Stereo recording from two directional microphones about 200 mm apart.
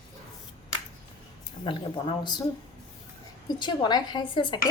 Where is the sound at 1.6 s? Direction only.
25° left (ahead or behind).